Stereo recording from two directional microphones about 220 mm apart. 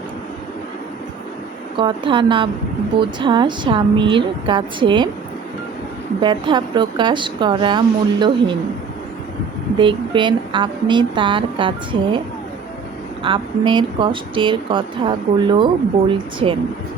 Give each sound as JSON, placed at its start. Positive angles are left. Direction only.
{"t": 1.7, "sound": "speech", "side_deg": -20}
{"t": 6.2, "sound": "speech", "side_deg": -20}
{"t": 9.7, "sound": "speech", "side_deg": -20}
{"t": 13.2, "sound": "speech", "side_deg": -20}